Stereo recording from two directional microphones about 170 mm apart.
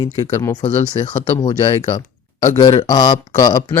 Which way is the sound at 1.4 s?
25° left (ahead or behind).